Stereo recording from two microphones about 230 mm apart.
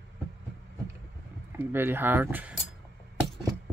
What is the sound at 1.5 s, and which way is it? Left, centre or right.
Speech, centre.